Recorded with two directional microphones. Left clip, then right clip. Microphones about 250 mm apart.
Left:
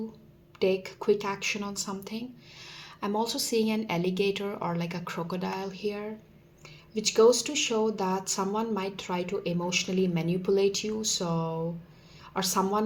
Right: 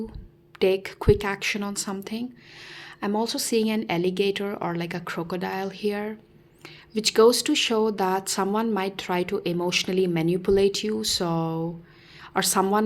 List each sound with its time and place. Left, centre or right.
0.6 s speech: right